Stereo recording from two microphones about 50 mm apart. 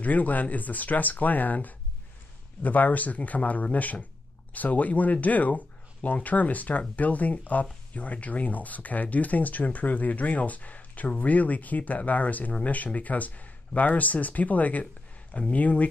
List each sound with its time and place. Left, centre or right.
0.0 s speech: left